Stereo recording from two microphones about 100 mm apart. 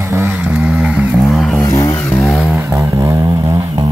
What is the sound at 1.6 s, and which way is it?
Vehicle, 35° left (ahead or behind).